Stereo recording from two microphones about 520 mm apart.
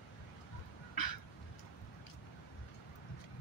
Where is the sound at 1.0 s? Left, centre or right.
Left.